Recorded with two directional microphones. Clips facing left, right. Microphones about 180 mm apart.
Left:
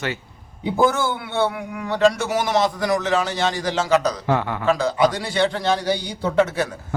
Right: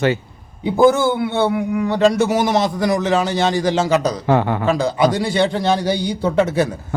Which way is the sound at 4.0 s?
30° right (ahead or behind).